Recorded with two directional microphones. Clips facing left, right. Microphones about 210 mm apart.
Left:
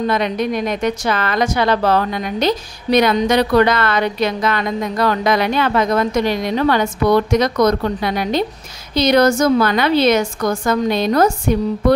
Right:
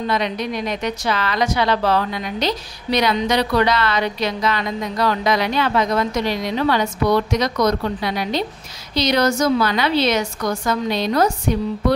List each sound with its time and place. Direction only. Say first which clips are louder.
0.0 s a woman's voice: left 4 dB; 50° left (ahead or behind)